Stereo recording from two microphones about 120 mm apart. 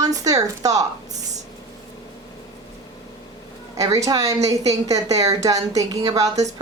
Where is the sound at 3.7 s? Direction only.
30° right (ahead or behind).